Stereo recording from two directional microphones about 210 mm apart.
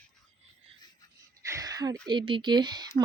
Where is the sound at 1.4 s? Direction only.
15° right (ahead or behind).